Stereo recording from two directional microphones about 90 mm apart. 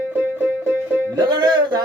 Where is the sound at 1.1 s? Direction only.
50° right (ahead or behind).